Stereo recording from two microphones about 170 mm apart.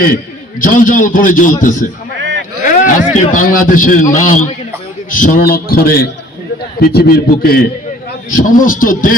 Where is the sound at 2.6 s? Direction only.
50° left (ahead or behind).